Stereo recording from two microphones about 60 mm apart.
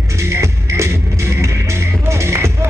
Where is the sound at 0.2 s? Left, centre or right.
Right.